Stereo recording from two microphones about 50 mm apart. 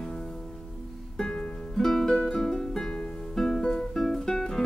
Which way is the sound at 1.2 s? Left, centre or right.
Centre.